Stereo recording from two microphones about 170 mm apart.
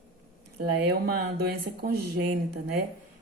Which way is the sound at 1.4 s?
70° right (ahead or behind).